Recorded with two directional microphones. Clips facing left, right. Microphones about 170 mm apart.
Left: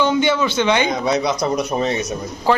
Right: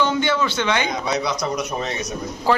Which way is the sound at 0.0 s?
20° left (ahead or behind).